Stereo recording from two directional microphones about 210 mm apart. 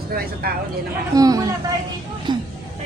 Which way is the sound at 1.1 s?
15° right (ahead or behind).